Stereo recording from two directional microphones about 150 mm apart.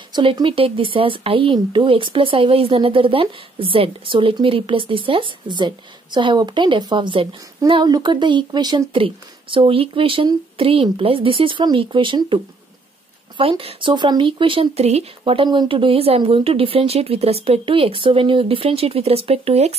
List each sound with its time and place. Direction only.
0.1 s speech: 35° right (ahead or behind)
13.4 s speech: 40° right (ahead or behind)